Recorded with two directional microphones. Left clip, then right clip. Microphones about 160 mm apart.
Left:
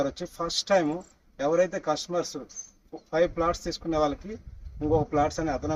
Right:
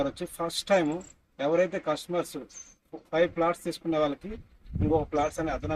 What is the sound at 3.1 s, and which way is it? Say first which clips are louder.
A man's voice: left 1 dB; 10° right (ahead or behind).